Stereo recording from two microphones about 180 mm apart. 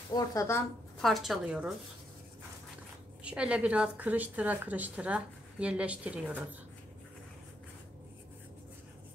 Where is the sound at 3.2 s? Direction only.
5° right (ahead or behind).